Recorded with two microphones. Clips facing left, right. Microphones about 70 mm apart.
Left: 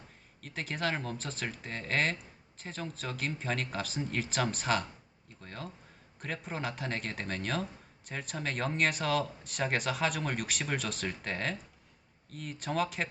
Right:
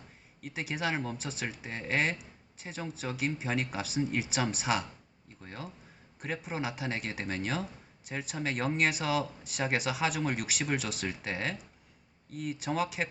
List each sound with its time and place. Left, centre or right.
0.4 s speech: centre